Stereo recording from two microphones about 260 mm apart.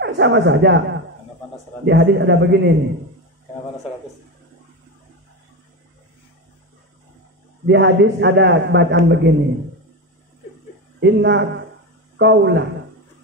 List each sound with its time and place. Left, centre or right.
0.0 s a man's voice: right
1.9 s a man's voice: right
7.6 s a man's voice: right
11.0 s a man's voice: right